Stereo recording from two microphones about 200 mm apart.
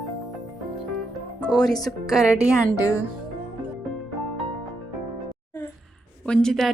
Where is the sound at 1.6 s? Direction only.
Centre (ahead or behind).